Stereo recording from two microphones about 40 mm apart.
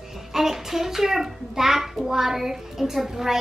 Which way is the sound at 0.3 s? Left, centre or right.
Centre.